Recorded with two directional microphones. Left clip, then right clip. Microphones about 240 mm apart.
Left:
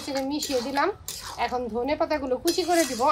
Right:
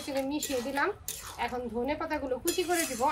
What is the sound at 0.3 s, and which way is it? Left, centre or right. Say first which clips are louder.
A woman's voice: left 5 dB; left.